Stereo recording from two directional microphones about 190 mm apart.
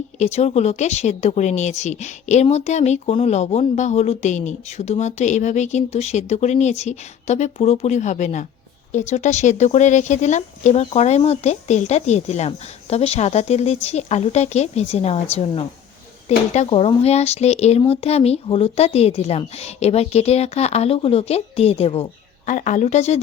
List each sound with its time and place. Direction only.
0.2 s speech: 35° left (ahead or behind)
22.4 s speech: 40° left (ahead or behind)